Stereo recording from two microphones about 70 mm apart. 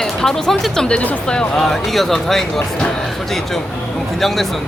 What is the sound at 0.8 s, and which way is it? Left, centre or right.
Speech, centre.